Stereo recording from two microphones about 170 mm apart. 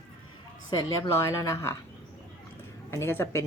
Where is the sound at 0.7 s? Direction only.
20° left (ahead or behind).